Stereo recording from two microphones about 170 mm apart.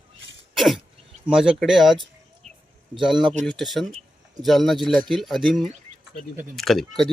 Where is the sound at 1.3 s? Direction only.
5° right (ahead or behind).